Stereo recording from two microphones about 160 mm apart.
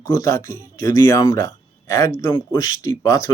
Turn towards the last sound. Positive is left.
turn(degrees=20)  # may be behind; listen again after turning